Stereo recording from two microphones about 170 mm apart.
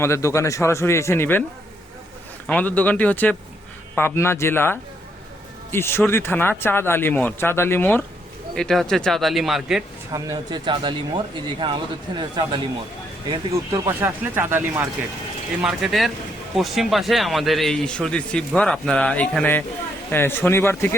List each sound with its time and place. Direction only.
0.0 s speech: 15° left (ahead or behind)
2.5 s a man's voice: 10° left (ahead or behind)
10.1 s speech: 20° right (ahead or behind)
13.5 s speech: 15° right (ahead or behind)
15.6 s a man's voice: centre (ahead or behind); by 20.9 s 15° left (ahead or behind)